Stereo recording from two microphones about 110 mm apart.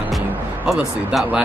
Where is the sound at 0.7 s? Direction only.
5° right (ahead or behind).